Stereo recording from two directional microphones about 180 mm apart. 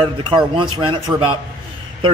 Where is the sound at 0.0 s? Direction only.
30° right (ahead or behind).